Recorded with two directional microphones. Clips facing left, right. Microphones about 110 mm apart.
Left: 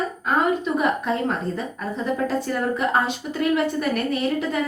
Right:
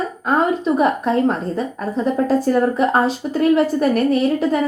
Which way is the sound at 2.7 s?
40° right (ahead or behind).